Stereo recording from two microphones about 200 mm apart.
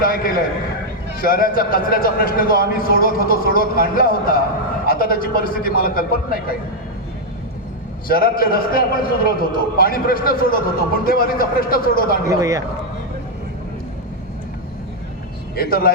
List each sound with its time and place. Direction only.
0.0 s a man's voice: 45° left (ahead or behind)
8.0 s a man's voice: 50° left (ahead or behind)
12.3 s a man's voice: 15° right (ahead or behind)
15.5 s a man's voice: 50° left (ahead or behind)